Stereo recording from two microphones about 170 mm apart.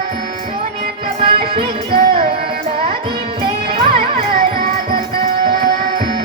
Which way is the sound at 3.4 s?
30° right (ahead or behind).